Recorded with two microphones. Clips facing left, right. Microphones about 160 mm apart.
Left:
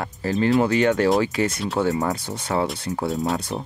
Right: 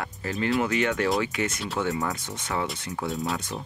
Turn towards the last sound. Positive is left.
turn(degrees=35)  # may be behind; listen again after turning